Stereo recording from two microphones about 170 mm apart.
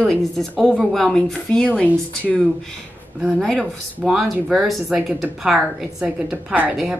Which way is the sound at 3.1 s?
Centre (ahead or behind).